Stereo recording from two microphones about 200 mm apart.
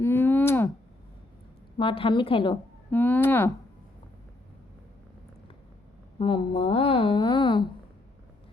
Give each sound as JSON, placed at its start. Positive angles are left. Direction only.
{"t": 0.0, "sound": "a sound", "side_deg": 10}
{"t": 1.8, "sound": "speech", "side_deg": 25}
{"t": 2.9, "sound": "speech", "side_deg": 10}
{"t": 6.1, "sound": "speech", "side_deg": 25}